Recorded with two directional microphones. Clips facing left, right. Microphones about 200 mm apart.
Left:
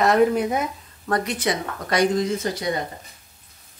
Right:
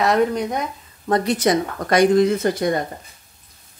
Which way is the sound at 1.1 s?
35° right (ahead or behind).